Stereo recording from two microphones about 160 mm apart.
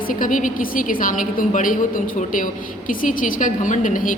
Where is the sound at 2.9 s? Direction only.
55° left (ahead or behind).